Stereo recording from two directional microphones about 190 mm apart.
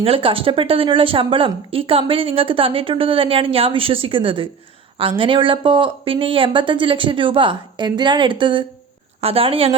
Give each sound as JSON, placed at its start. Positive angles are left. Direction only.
{"t": 0.0, "sound": "speech", "side_deg": -30}